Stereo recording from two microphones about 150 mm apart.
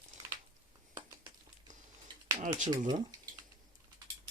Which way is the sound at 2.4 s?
55° right (ahead or behind).